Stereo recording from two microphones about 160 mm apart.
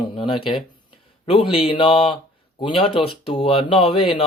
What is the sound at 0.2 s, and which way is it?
Speech, 30° left (ahead or behind).